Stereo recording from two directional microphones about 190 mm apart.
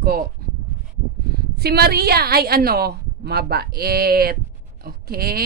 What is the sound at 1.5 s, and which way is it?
A woman's voice, 55° right (ahead or behind).